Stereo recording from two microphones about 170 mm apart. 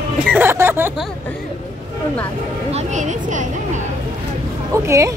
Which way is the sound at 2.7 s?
45° right (ahead or behind).